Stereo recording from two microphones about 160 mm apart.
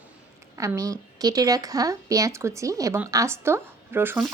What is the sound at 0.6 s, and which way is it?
Speech, 20° right (ahead or behind).